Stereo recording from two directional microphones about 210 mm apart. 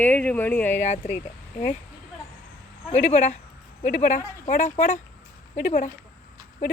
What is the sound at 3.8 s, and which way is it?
Speech, 35° left (ahead or behind).